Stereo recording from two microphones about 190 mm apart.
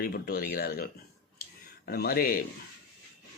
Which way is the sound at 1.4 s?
50° left (ahead or behind).